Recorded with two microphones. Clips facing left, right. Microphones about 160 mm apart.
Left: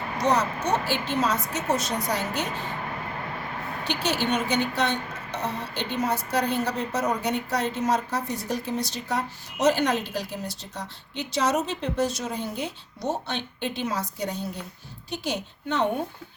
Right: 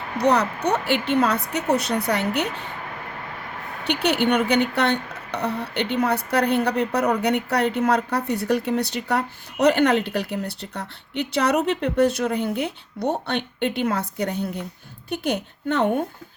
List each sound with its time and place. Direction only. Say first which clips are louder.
0.2 s speech: right 4 dB; 65° right (ahead or behind)
3.8 s speech: right 6 dB; 65° right (ahead or behind)